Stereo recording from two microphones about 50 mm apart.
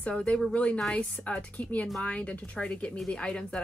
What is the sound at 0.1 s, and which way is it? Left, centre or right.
A woman's voice, left.